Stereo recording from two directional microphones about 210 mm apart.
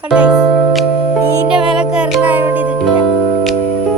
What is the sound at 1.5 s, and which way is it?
Music, 5° right (ahead or behind).